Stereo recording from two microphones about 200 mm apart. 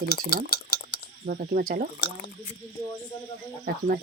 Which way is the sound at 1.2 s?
50° right (ahead or behind).